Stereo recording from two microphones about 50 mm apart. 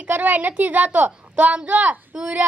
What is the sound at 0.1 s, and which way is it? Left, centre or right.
Speech, right.